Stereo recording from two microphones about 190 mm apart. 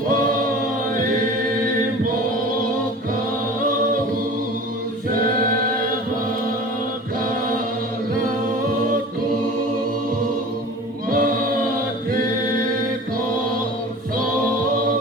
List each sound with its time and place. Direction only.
11.1 s choir: 50° right (ahead or behind)